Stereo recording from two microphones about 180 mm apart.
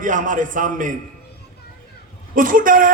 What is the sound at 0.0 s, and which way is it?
Speech, 45° right (ahead or behind).